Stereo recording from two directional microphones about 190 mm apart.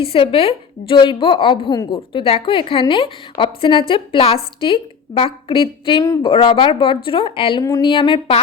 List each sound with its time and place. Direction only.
0.0 s a woman's voice: 30° left (ahead or behind)